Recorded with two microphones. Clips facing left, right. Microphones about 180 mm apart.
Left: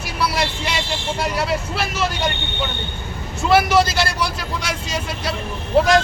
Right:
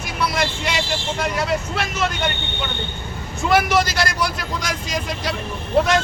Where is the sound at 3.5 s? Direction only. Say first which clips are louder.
Left 3 dB; 30° left (ahead or behind).